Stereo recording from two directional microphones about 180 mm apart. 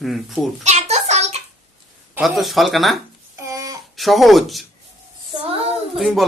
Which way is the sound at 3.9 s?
Centre (ahead or behind).